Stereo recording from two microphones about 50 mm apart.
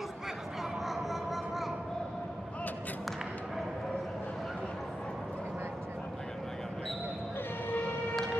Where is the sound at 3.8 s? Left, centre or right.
Centre.